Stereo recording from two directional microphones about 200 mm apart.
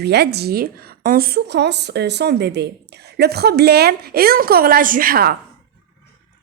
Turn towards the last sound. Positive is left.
turn(degrees=-50)  # may be behind; listen again after turning